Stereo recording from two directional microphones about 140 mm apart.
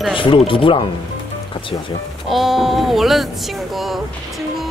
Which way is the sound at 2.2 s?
Centre (ahead or behind).